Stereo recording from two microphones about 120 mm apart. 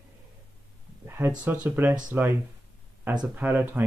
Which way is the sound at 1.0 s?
20° right (ahead or behind).